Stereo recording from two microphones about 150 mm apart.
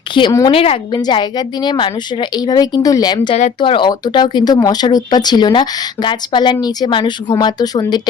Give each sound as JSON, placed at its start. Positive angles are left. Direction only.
{"t": 0.1, "sound": "a woman's voice", "side_deg": 30}